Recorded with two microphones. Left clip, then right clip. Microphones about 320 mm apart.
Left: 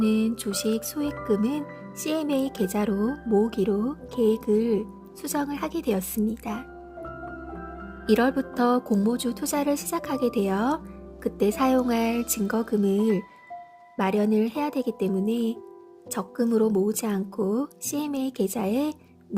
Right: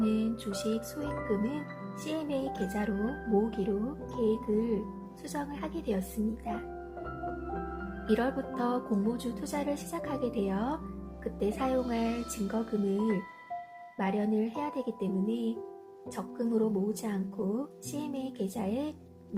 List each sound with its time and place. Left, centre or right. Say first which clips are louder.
0.0 s speech: left 7 dB; left
8.0 s speech: left 8 dB; left